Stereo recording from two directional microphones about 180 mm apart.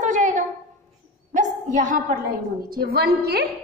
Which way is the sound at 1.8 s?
50° right (ahead or behind).